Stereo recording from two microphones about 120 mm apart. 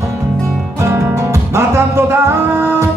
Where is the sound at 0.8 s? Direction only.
25° right (ahead or behind).